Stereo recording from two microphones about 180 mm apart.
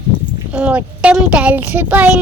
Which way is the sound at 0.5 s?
5° right (ahead or behind).